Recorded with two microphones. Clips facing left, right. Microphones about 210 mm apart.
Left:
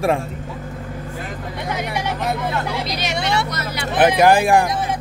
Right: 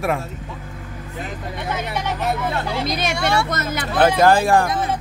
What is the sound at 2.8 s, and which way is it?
Speech, 50° right (ahead or behind).